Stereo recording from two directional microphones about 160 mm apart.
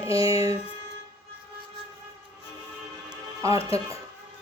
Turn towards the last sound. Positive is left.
turn(degrees=40)  # may be behind; listen again after turning